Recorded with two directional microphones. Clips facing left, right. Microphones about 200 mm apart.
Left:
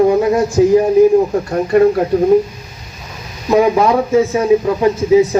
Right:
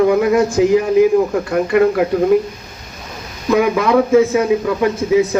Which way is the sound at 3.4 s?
35° left (ahead or behind).